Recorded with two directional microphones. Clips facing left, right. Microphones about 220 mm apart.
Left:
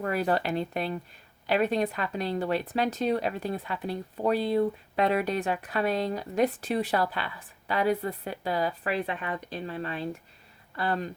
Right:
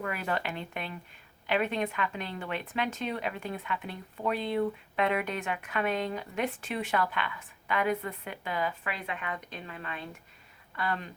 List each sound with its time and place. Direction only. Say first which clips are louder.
0.0 s speech: left 6 dB; 35° left (ahead or behind)